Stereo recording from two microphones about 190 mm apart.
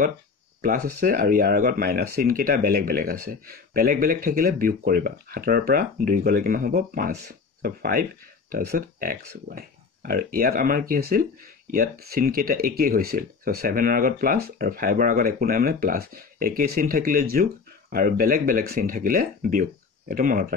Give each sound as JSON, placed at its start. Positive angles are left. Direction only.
{"t": 0.6, "sound": "speech", "side_deg": -50}